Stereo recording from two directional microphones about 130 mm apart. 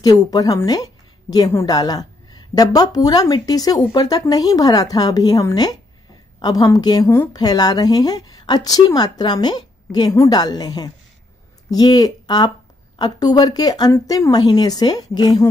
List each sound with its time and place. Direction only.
0.0 s a woman's voice: 30° left (ahead or behind)